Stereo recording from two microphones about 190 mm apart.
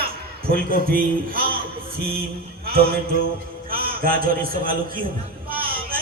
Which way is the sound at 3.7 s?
50° right (ahead or behind).